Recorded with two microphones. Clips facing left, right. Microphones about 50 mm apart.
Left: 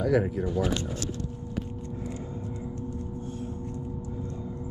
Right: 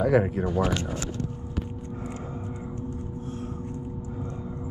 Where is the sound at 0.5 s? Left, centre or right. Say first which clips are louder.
Right 2 dB; right.